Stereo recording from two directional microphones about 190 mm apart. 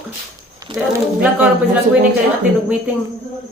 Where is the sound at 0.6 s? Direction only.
15° right (ahead or behind).